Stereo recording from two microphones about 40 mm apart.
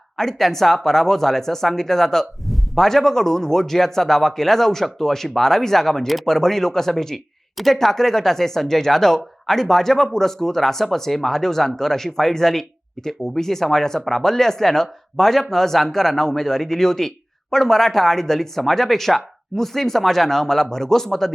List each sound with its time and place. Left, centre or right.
0.2 s speech: centre